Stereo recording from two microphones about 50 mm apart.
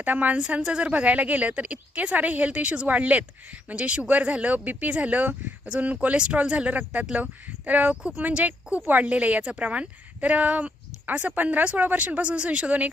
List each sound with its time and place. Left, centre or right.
0.0 s speech: right
0.3 s a woman's voice: right